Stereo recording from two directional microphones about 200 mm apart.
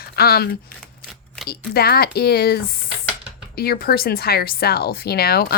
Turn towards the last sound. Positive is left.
turn(degrees=50)  # may be behind; listen again after turning